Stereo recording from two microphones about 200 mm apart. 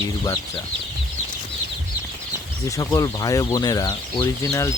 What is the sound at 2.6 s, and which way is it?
Speech, 15° left (ahead or behind).